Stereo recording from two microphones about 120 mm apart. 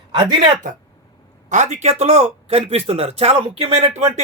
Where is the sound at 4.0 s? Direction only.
65° right (ahead or behind).